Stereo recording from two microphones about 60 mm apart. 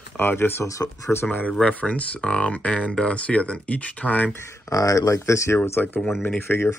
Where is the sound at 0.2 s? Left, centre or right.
Left.